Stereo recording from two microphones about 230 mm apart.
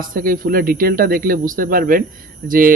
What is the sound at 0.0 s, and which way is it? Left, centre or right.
Speech, right.